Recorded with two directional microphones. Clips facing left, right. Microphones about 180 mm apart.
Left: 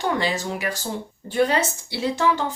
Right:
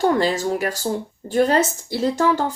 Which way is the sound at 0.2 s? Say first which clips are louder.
Right 5 dB; 40° right (ahead or behind).